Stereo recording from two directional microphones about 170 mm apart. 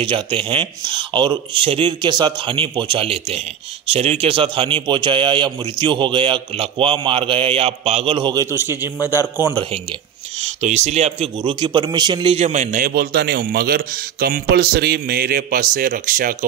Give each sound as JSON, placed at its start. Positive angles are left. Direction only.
{"t": 0.0, "sound": "speech", "side_deg": -30}
{"t": 10.4, "sound": "a man's voice", "side_deg": -40}
{"t": 12.7, "sound": "speech", "side_deg": -60}